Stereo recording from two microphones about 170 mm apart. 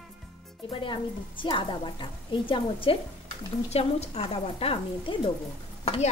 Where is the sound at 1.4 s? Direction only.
30° left (ahead or behind).